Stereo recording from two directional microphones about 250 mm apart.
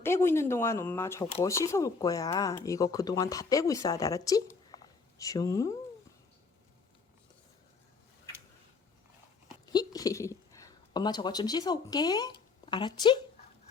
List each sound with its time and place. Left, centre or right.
0.0 s speech: centre
9.6 s speech: centre